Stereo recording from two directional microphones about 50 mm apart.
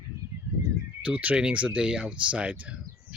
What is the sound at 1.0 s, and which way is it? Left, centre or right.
Speech, right.